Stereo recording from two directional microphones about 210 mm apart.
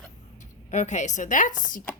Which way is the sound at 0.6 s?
35° left (ahead or behind).